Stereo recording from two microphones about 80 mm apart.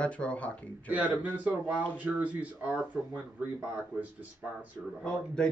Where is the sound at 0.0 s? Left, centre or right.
Centre.